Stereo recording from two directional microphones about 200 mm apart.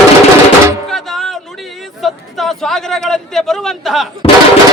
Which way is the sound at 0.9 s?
Centre (ahead or behind).